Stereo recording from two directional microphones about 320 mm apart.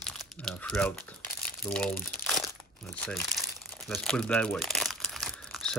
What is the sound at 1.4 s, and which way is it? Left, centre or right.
Crumpling, centre.